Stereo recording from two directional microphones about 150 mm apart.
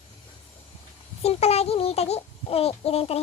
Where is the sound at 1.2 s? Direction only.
45° left (ahead or behind).